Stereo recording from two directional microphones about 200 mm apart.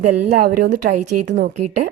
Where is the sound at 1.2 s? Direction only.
60° right (ahead or behind).